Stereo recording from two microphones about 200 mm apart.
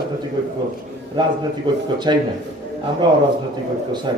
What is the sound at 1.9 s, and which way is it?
A man's voice, 20° right (ahead or behind).